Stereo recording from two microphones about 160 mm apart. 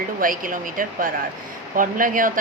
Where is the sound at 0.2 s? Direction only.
60° right (ahead or behind).